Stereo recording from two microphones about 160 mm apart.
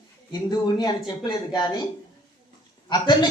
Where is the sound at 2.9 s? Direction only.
25° left (ahead or behind).